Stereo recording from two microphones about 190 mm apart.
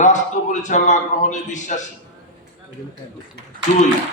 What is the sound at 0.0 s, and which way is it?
A man's voice, 40° left (ahead or behind).